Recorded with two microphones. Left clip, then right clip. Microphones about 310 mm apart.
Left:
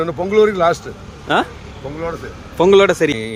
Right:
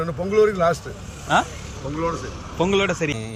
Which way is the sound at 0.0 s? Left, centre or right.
Left.